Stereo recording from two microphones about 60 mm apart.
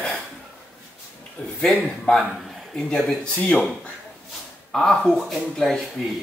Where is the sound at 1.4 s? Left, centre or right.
Left.